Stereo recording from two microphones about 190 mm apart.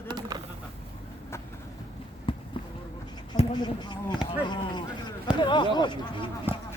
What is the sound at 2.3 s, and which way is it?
Basketball bounce, 30° left (ahead or behind).